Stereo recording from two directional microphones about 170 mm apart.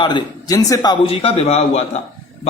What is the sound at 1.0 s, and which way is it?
Speech, 35° left (ahead or behind).